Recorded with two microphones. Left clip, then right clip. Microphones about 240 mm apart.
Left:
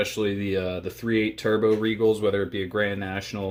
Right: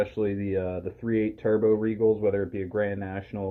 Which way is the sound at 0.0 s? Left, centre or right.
Left.